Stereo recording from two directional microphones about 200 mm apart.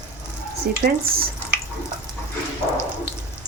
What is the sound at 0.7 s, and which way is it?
Speech, 50° right (ahead or behind).